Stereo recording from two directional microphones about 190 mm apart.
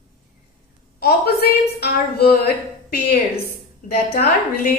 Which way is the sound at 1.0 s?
55° left (ahead or behind).